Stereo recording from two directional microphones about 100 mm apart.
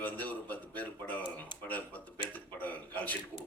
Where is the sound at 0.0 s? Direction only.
15° left (ahead or behind).